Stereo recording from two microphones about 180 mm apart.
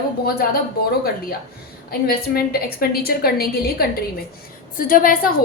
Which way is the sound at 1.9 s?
55° left (ahead or behind).